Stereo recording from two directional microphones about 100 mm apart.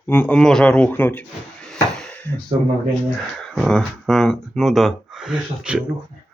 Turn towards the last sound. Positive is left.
turn(degrees=-10)  # may be behind; listen again after turning